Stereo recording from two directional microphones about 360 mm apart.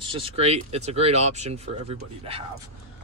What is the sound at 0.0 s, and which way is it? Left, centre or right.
Speech, centre.